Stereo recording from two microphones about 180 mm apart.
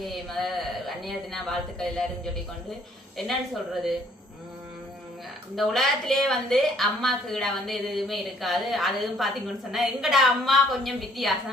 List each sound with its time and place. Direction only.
0.0 s a woman's voice: centre (ahead or behind)
5.5 s a woman's voice: centre (ahead or behind)